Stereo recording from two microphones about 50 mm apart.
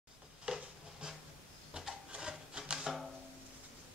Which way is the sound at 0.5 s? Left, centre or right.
Centre.